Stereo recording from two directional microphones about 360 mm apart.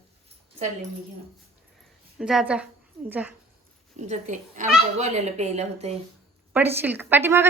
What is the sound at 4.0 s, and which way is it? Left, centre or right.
Speech, centre.